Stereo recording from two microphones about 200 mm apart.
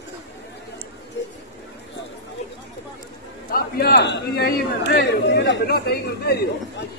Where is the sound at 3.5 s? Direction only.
50° left (ahead or behind).